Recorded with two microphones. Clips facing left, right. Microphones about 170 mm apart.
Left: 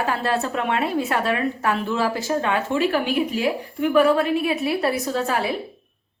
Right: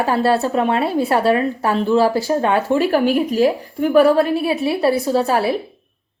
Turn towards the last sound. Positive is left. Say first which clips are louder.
# right 6 dB
turn(degrees=-35)  # may be behind; listen again after turning